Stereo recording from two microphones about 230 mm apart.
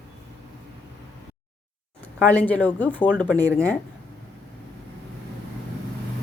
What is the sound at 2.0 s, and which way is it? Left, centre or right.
Speech, centre.